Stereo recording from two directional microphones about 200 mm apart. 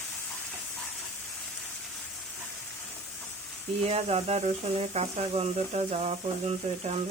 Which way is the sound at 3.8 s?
30° right (ahead or behind).